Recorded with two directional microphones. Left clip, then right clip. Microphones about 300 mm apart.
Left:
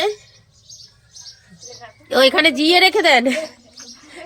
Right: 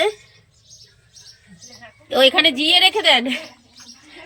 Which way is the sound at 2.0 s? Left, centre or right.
Centre.